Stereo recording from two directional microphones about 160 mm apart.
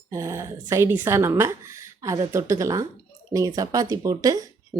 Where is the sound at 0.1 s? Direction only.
20° right (ahead or behind).